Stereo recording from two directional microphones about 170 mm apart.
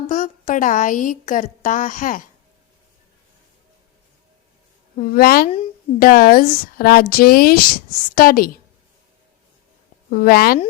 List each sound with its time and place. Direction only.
0.1 s a woman's voice: 50° left (ahead or behind)
4.9 s speech: 55° left (ahead or behind)
10.1 s speech: 60° left (ahead or behind)